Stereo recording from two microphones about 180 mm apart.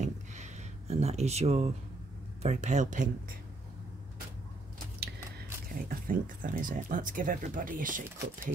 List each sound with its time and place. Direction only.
0.0 s a sound: 40° right (ahead or behind)
2.4 s speech: 40° right (ahead or behind)
5.7 s speech: 50° right (ahead or behind)